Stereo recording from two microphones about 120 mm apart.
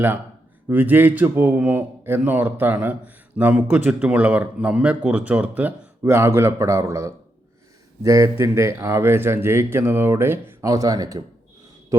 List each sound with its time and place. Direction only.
0.7 s a man's voice: 15° right (ahead or behind); by 11.2 s 30° right (ahead or behind)